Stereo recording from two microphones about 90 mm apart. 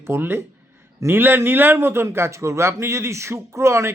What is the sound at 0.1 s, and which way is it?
A man's voice, 25° right (ahead or behind).